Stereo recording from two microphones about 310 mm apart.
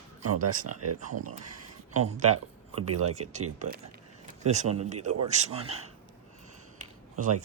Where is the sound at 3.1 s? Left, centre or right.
Right.